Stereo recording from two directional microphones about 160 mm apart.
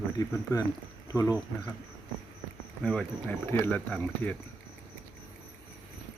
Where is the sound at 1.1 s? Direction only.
20° left (ahead or behind).